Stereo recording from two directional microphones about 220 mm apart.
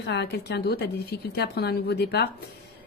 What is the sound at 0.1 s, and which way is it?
Speech, 50° left (ahead or behind).